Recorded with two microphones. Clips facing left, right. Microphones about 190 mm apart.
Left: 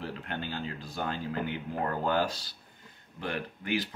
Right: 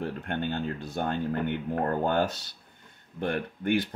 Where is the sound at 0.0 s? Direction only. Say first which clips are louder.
Right 6 dB; 60° right (ahead or behind).